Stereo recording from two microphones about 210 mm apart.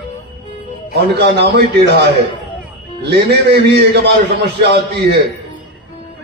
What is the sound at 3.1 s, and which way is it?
A man's voice, 50° right (ahead or behind).